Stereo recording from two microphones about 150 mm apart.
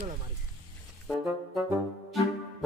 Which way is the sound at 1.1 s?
5° right (ahead or behind).